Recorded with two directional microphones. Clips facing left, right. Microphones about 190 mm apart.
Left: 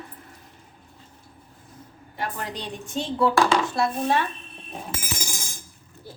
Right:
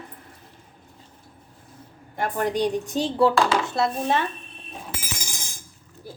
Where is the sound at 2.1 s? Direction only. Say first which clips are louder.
Right 8 dB; 50° right (ahead or behind).